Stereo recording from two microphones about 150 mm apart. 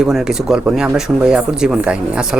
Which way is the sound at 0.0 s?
5° right (ahead or behind).